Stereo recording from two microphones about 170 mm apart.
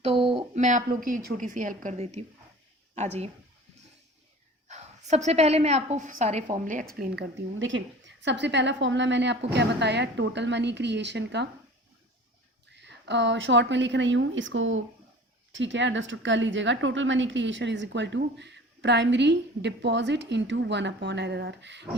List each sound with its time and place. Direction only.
0.0 s a sound: 30° right (ahead or behind)
0.5 s a woman's voice: 45° right (ahead or behind)
4.7 s a woman's voice: 40° right (ahead or behind)
7.7 s a woman's voice: 90° right
12.7 s a woman's voice: 90° right